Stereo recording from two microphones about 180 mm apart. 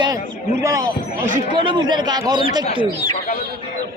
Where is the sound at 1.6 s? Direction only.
25° right (ahead or behind).